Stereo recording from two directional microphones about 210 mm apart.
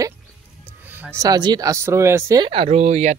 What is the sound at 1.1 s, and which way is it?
Speech, 20° right (ahead or behind).